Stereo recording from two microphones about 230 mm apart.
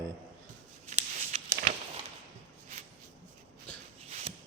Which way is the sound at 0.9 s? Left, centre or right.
Right.